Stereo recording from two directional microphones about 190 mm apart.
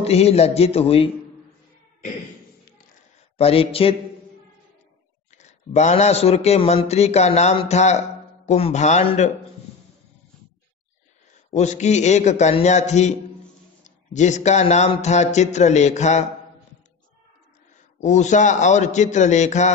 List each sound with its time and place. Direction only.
0.0 s speech: 35° left (ahead or behind)
3.3 s speech: 30° left (ahead or behind)
5.4 s speech: 35° left (ahead or behind)
11.5 s speech: 35° left (ahead or behind)
18.0 s speech: 40° left (ahead or behind)